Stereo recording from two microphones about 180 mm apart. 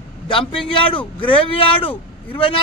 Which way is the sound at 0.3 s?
30° left (ahead or behind).